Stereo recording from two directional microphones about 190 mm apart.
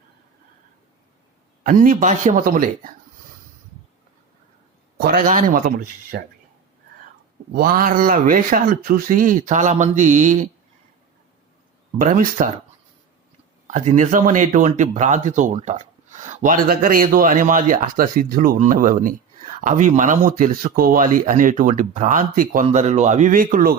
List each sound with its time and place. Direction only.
1.6 s speech: 45° right (ahead or behind)
4.9 s speech: 50° right (ahead or behind)
7.5 s speech: 50° right (ahead or behind)
11.9 s speech: 45° right (ahead or behind)
13.7 s speech: 40° right (ahead or behind)